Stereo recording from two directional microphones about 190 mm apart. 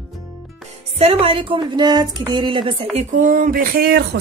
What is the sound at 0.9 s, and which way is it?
Speech, 30° right (ahead or behind).